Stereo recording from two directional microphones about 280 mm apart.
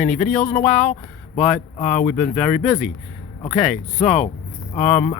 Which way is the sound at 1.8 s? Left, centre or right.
Left.